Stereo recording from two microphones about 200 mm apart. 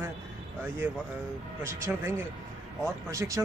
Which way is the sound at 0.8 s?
10° right (ahead or behind).